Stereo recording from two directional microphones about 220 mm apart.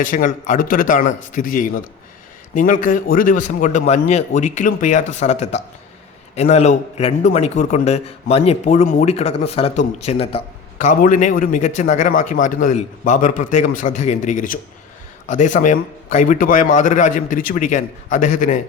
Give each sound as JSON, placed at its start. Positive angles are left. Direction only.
{"t": 0.0, "sound": "a man's voice", "side_deg": 40}